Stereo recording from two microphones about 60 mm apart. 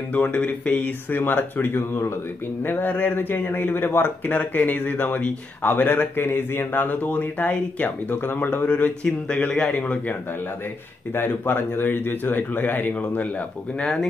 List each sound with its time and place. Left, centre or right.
0.1 s speech: left
8.6 s speech: left
11.1 s speech: left
13.7 s speech: centre